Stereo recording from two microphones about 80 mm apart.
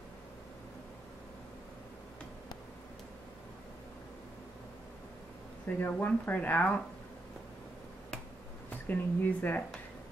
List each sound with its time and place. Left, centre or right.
5.8 s speech: left
8.6 s speech: left